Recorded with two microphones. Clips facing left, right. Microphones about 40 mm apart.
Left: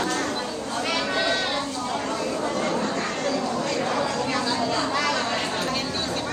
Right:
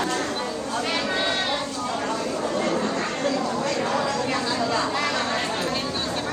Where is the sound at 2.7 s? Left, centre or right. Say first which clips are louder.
Right 1 dB; right.